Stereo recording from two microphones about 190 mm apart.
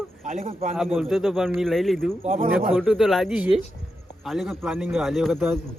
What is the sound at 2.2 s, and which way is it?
Speech, 40° right (ahead or behind).